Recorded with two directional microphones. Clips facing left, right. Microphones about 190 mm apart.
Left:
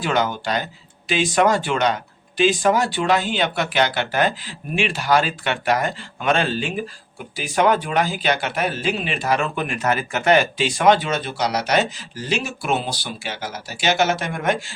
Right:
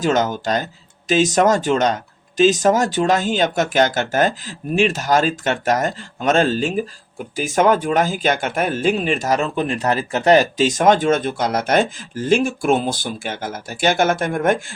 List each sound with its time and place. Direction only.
0.0 s speech: 40° right (ahead or behind)